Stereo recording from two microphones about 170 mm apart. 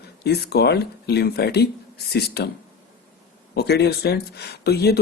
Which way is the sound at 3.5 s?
75° left (ahead or behind).